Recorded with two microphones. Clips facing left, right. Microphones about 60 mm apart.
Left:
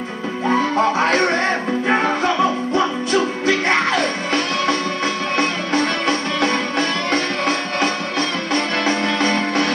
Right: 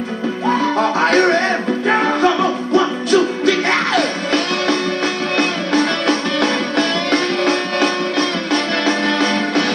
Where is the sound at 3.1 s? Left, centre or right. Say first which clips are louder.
Right 3 dB; left.